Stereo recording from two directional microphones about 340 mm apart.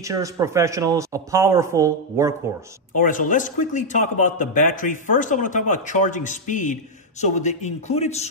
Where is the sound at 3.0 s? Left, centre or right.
Left.